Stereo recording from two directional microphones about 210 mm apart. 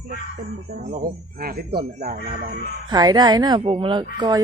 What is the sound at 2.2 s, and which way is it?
Speech, 35° right (ahead or behind).